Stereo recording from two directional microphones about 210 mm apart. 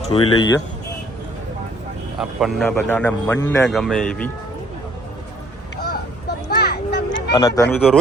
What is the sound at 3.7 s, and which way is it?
Speech, centre (ahead or behind).